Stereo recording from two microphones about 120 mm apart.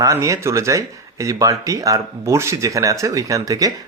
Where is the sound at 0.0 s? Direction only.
25° right (ahead or behind).